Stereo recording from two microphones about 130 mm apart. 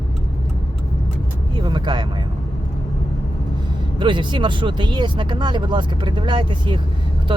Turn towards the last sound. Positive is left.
turn(degrees=-40)  # may be behind; listen again after turning